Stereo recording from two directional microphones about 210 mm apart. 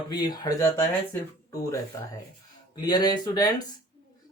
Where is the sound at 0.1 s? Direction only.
20° left (ahead or behind).